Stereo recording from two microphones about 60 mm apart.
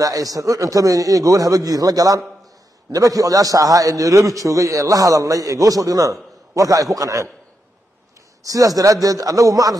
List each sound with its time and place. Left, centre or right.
0.0 s a man's voice: right
8.5 s a man's voice: right